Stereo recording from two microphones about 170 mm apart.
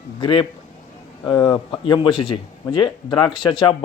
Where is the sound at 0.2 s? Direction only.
30° left (ahead or behind).